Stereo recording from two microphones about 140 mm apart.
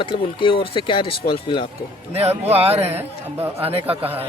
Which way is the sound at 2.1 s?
45° right (ahead or behind).